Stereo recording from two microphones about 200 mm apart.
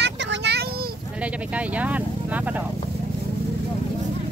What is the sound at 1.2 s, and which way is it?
Speech, 5° right (ahead or behind).